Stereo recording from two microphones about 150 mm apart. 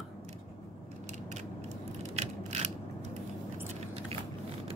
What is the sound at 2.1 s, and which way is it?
Mechanisms, 45° right (ahead or behind).